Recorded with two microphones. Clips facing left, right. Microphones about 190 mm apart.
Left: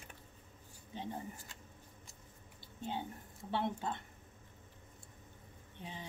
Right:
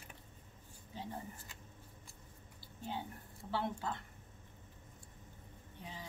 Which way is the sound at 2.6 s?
20° left (ahead or behind).